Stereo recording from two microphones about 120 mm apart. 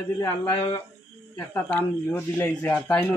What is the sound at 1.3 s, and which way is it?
Speech, 15° left (ahead or behind).